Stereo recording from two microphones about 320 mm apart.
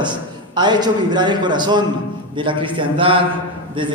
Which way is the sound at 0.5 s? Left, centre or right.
Centre.